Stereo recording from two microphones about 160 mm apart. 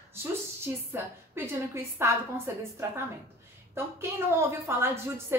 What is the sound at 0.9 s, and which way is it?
A woman's voice, 15° right (ahead or behind).